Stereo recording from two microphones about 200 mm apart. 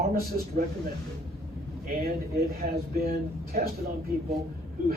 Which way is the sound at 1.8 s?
50° right (ahead or behind).